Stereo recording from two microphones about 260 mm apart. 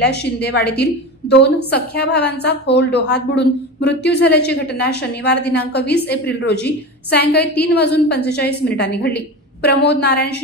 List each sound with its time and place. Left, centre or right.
0.0 s a woman's voice: left